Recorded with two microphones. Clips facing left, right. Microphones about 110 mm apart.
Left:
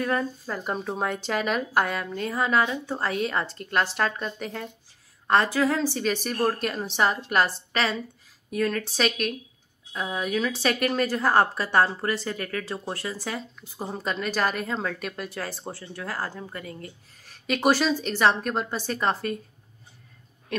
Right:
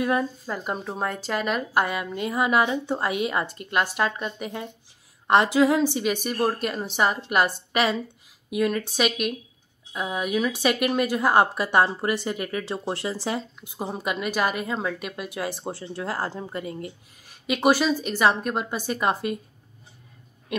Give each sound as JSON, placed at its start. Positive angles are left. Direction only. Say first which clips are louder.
{"t": 0.0, "sound": "a woman's voice", "louder": "right 2 dB", "side_deg": -10}
{"t": 15.7, "sound": "a woman's voice", "louder": "right 4 dB", "side_deg": -25}